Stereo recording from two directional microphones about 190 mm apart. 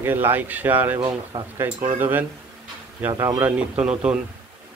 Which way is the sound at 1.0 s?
25° right (ahead or behind).